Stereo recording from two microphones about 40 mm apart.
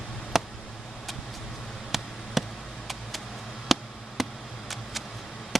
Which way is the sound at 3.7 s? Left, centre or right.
Centre.